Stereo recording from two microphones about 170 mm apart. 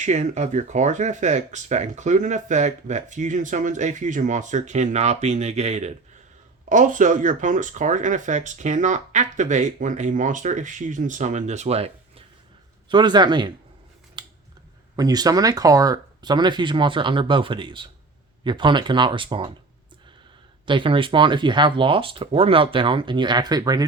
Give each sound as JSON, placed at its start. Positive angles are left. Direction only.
{"t": 0.0, "sound": "speech", "side_deg": -45}
{"t": 12.9, "sound": "speech", "side_deg": -25}
{"t": 14.2, "sound": "scissors", "side_deg": -25}
{"t": 14.9, "sound": "speech", "side_deg": -20}
{"t": 20.7, "sound": "speech", "side_deg": -30}